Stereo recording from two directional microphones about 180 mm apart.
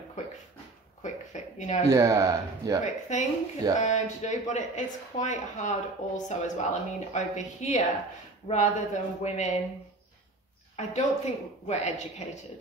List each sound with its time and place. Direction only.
1.0 s a sound: 40° left (ahead or behind)
1.9 s speech: 15° right (ahead or behind)
2.8 s speech: 40° left (ahead or behind)
10.8 s speech: 40° left (ahead or behind)